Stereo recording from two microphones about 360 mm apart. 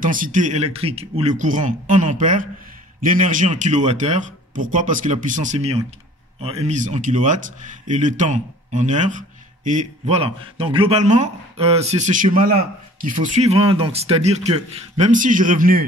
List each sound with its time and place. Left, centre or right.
0.0 s a man's voice: right